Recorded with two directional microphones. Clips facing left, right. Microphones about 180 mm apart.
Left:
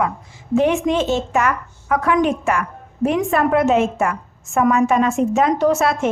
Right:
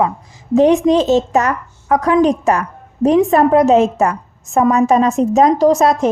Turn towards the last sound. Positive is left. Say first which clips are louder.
# right 5 dB
turn(degrees=-35)  # may be behind; listen again after turning